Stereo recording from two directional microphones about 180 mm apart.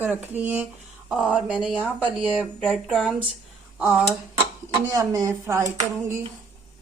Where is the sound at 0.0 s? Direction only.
10° right (ahead or behind).